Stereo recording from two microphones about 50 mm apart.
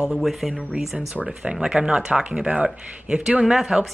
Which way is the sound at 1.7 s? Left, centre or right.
Centre.